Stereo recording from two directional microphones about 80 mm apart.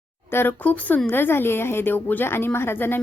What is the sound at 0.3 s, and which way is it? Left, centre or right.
Speech, left.